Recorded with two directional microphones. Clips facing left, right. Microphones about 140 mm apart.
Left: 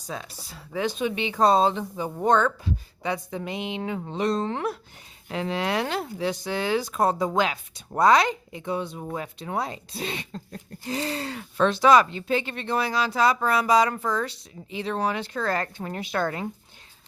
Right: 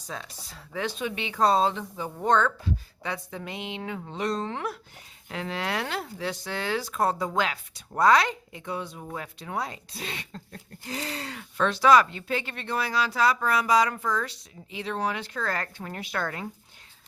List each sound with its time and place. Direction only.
0.1 s speech: 10° left (ahead or behind); by 16.5 s 25° left (ahead or behind)